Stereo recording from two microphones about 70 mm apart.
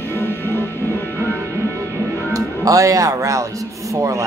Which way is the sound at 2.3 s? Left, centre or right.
Right.